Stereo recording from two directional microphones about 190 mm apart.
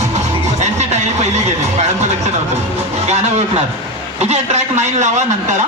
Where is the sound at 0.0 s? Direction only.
35° right (ahead or behind).